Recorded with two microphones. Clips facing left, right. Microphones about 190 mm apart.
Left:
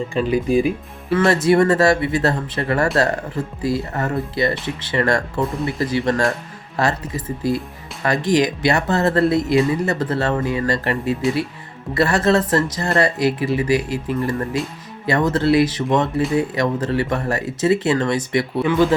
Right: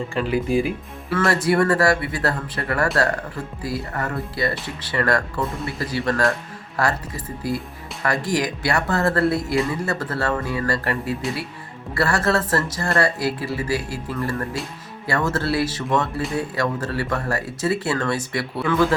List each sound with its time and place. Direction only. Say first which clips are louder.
0.1 s speech: left 3 dB; 20° left (ahead or behind)